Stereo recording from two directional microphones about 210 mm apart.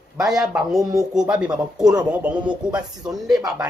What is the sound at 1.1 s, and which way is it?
Speech, 5° right (ahead or behind).